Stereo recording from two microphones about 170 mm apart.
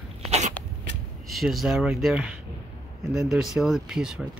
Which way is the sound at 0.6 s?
10° left (ahead or behind).